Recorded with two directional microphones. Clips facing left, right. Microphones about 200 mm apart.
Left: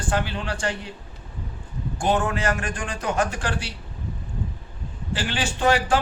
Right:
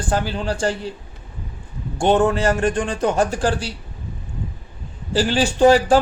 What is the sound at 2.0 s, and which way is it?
A man's voice, 30° right (ahead or behind).